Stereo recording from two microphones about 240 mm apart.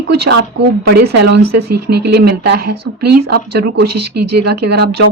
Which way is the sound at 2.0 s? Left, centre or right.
Right.